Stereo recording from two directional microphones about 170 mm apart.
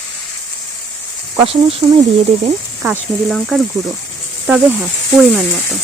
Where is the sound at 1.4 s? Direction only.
35° right (ahead or behind).